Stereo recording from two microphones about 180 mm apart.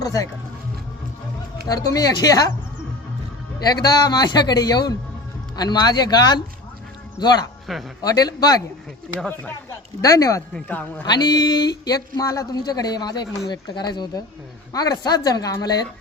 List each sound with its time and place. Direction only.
0.0 s speech: 20° left (ahead or behind)
1.9 s speech: 20° left (ahead or behind)
3.7 s speech: 20° left (ahead or behind)
7.7 s speech: centre (ahead or behind)
8.0 s speech: 20° left (ahead or behind)
11.0 s speech: 25° left (ahead or behind)